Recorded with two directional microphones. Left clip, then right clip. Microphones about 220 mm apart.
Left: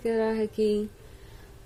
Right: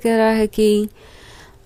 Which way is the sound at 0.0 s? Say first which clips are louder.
Right 11 dB; 40° right (ahead or behind).